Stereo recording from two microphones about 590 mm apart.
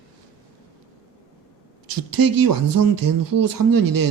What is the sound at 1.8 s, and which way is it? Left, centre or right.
Speech, right.